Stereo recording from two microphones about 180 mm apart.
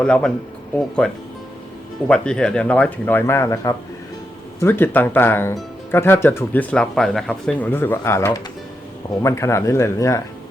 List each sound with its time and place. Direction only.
0.0 s speech: 5° left (ahead or behind)